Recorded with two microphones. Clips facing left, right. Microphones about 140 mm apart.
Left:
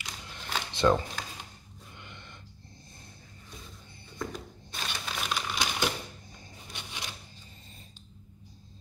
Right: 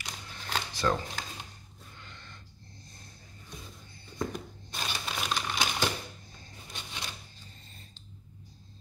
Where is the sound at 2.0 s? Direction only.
20° left (ahead or behind).